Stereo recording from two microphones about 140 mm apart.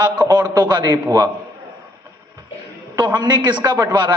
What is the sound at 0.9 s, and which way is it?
Speech, 25° right (ahead or behind).